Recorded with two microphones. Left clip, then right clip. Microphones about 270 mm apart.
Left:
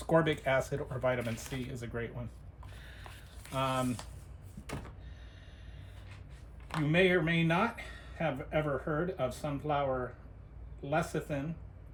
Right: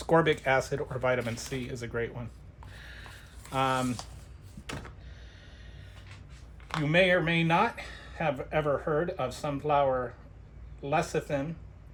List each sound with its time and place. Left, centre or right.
0.0 s speech: right
3.5 s speech: right
6.8 s speech: right
10.8 s speech: right